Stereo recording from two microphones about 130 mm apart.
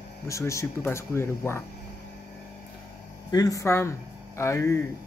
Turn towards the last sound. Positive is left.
turn(degrees=20)  # may be behind; listen again after turning